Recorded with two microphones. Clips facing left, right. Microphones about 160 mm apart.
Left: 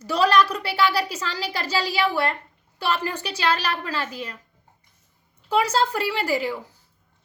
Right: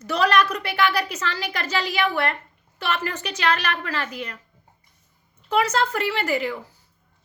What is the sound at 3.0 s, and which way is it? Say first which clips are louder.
Speech: left 1 dB; 10° left (ahead or behind).